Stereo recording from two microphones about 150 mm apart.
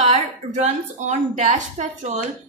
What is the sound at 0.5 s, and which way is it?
A woman's voice, 50° right (ahead or behind).